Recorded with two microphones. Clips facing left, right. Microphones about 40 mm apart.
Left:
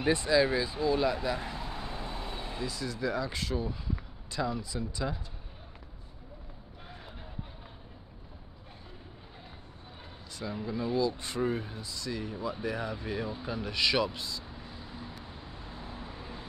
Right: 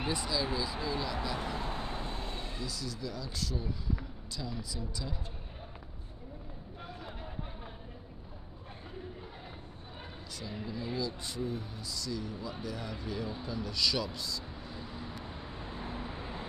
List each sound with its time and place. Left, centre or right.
0.0 s speech: left
1.6 s vehicle: centre
2.0 s vehicle: centre
2.5 s speech: left
10.4 s speech: left
11.0 s speech: left
15.0 s vehicle: right